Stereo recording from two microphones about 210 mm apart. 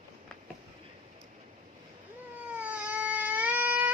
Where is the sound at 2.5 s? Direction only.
5° right (ahead or behind).